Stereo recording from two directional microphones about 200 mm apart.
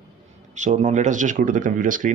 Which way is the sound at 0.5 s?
35° right (ahead or behind).